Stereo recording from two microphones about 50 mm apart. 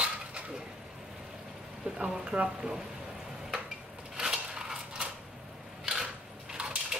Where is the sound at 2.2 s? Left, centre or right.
Right.